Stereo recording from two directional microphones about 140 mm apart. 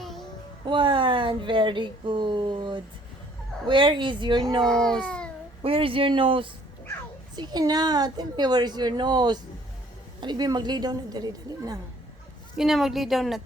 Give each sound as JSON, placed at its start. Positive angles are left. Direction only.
{"t": 0.0, "sound": "a sound", "side_deg": 0}
{"t": 0.7, "sound": "speech", "side_deg": -35}
{"t": 4.6, "sound": "a child's voice", "side_deg": 5}
{"t": 5.6, "sound": "a woman's voice", "side_deg": -40}
{"t": 12.5, "sound": "a woman's voice", "side_deg": 0}